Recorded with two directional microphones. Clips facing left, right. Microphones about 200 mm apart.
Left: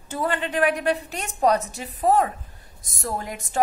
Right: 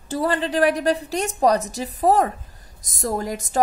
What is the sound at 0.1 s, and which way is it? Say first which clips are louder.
A woman's voice: right 4 dB; 35° right (ahead or behind).